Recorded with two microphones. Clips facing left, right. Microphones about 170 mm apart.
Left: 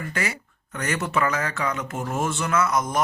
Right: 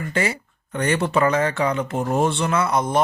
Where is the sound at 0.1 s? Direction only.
30° right (ahead or behind).